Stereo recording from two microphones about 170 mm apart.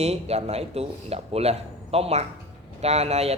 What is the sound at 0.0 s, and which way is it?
Speech, 40° right (ahead or behind).